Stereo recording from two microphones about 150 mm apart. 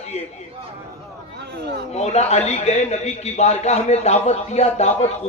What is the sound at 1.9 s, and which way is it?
A man's voice, 45° left (ahead or behind).